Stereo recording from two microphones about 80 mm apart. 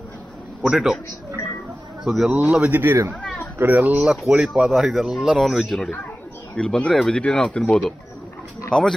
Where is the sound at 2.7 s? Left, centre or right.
Right.